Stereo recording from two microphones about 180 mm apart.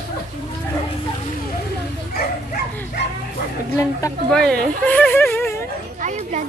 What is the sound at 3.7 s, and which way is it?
Speech, 15° left (ahead or behind).